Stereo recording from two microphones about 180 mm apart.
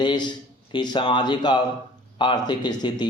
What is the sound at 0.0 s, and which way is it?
A man's voice, 25° left (ahead or behind).